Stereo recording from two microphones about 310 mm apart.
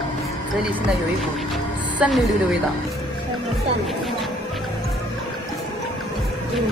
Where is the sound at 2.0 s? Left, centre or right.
Centre.